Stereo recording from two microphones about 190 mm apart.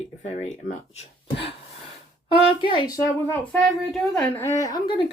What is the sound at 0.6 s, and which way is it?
Speech, 25° right (ahead or behind).